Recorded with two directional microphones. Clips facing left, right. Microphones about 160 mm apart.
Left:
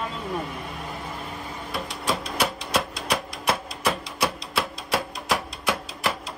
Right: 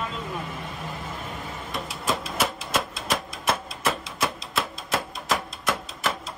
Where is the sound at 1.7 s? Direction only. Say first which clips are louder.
Left 1 dB; centre (ahead or behind).